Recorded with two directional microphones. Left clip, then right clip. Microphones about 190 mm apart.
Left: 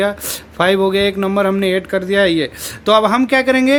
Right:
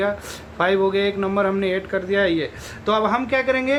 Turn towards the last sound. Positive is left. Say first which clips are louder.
# left 7 dB
turn(degrees=60)  # may be behind; listen again after turning